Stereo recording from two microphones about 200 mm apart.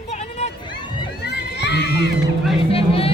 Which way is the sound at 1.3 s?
55° left (ahead or behind).